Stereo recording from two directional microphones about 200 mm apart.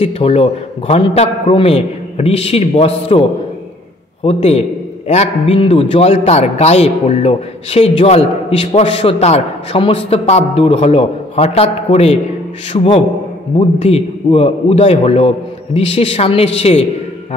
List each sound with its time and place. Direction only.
0.0 s a man's voice: 30° left (ahead or behind)